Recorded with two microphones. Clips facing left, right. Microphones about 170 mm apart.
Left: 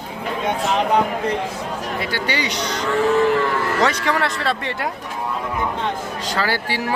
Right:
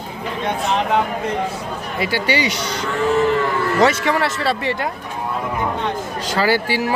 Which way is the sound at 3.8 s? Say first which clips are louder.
Right 5 dB; 5° right (ahead or behind).